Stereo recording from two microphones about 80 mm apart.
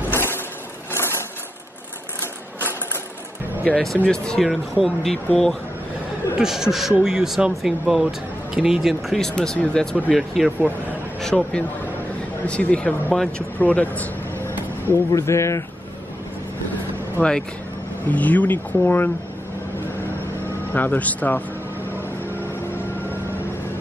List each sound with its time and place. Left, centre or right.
0.1 s vehicle: left
0.9 s crushing: left
3.6 s speech: centre
6.3 s speech: centre
9.2 s speech: centre
15.0 s speech: left
17.2 s speech: left
20.7 s speech: left